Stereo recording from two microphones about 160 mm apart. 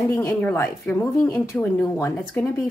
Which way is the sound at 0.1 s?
15° left (ahead or behind).